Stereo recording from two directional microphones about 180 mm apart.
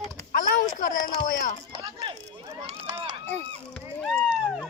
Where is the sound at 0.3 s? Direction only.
50° left (ahead or behind).